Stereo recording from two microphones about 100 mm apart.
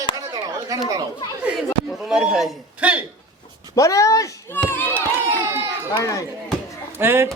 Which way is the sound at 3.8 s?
35° left (ahead or behind).